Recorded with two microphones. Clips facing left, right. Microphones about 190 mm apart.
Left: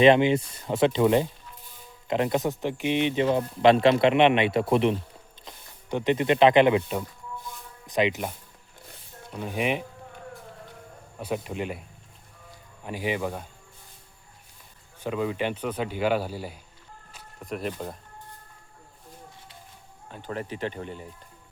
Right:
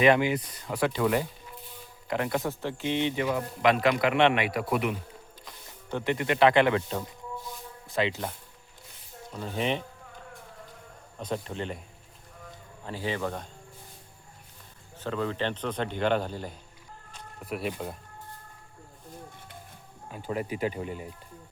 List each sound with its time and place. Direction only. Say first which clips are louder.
0.0 s a man's voice: left 4 dB; 25° left (ahead or behind)
3.2 s a man's voice: left 7 dB; 30° left (ahead or behind)
5.5 s a man's voice: left 4 dB; 15° left (ahead or behind)
11.2 s a man's voice: left 3 dB; 10° left (ahead or behind)
12.8 s a man's voice: left 3 dB; 15° left (ahead or behind)
15.0 s a man's voice: left 2 dB; 15° left (ahead or behind)
17.4 s speech: left 1 dB; 5° right (ahead or behind)
20.1 s speech: right 2 dB; 10° right (ahead or behind)